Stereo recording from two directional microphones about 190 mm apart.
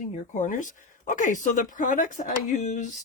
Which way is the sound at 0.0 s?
40° left (ahead or behind).